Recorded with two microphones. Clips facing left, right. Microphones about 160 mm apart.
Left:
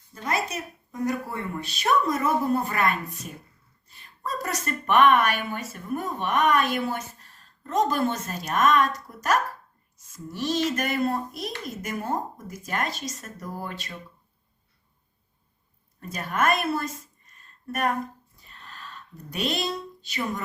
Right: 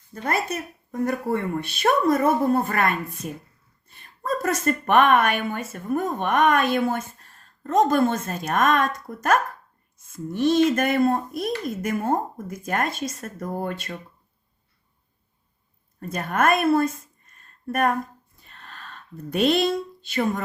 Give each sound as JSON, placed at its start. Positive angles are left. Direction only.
{"t": 0.1, "sound": "speech", "side_deg": -55}
{"t": 16.0, "sound": "a woman's voice", "side_deg": -55}
{"t": 18.3, "sound": "a sound", "side_deg": -50}